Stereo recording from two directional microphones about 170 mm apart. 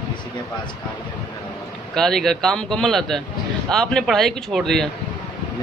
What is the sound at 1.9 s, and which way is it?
A man's voice, centre (ahead or behind).